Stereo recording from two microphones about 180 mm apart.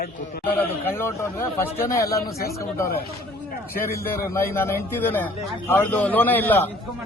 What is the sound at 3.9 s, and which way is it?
Speech, 15° left (ahead or behind).